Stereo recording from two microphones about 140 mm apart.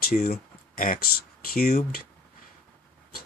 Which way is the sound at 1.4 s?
90° left.